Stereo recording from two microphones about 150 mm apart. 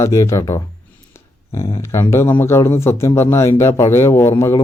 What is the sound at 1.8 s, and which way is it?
Speech, 20° left (ahead or behind).